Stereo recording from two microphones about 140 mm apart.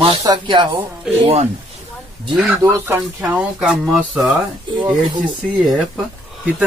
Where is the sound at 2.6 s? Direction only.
20° right (ahead or behind).